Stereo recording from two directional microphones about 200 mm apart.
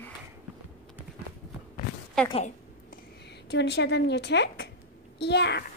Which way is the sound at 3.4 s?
60° left (ahead or behind).